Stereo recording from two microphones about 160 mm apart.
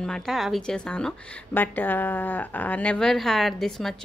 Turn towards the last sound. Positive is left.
turn(degrees=0)  # may be behind; listen again after turning